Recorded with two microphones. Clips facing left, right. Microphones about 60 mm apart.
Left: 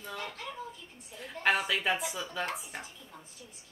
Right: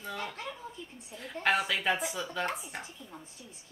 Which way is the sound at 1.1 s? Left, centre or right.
Centre.